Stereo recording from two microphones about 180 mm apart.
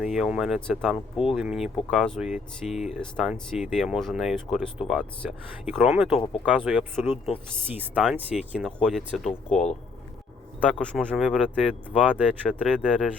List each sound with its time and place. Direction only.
0.0 s speech: 5° right (ahead or behind)
9.5 s speech: 40° left (ahead or behind)
10.6 s speech: 5° left (ahead or behind)
11.7 s speech: 5° right (ahead or behind)